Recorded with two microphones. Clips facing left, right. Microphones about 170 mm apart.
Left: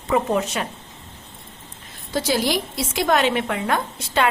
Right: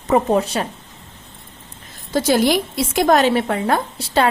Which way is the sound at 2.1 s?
50° right (ahead or behind).